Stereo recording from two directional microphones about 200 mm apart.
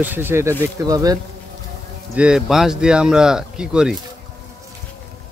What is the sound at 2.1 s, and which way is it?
Speech, 5° right (ahead or behind).